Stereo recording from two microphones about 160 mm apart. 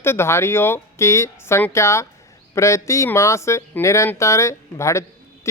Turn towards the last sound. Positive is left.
turn(degrees=20)  # may be behind; listen again after turning